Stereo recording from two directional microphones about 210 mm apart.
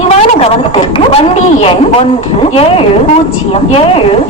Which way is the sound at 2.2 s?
25° left (ahead or behind).